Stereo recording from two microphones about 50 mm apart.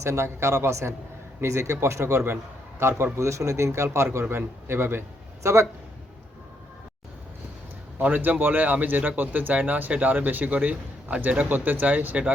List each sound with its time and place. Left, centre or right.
0.0 s speech: right
2.3 s a sound: right
3.2 s a man's voice: right
8.1 s speech: right